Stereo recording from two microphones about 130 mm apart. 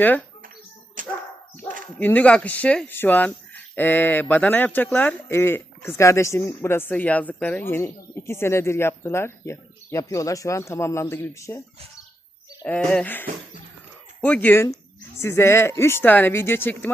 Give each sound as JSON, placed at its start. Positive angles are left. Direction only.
{"t": 1.0, "sound": "dog", "side_deg": -80}
{"t": 2.0, "sound": "speech", "side_deg": 15}
{"t": 12.6, "sound": "speech", "side_deg": 10}